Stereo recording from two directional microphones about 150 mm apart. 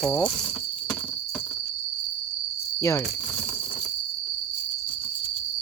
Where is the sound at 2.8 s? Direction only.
20° left (ahead or behind).